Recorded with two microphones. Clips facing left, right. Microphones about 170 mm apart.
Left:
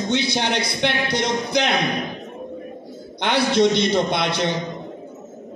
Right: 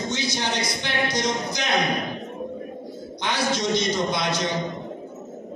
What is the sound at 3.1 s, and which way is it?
A man's voice, 60° left (ahead or behind).